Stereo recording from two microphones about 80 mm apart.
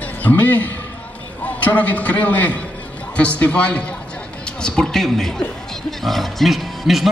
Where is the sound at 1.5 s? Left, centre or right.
Centre.